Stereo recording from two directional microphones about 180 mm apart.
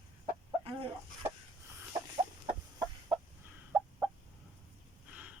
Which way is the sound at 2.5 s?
20° right (ahead or behind).